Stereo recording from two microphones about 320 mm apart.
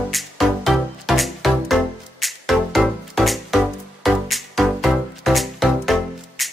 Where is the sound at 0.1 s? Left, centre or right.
Centre.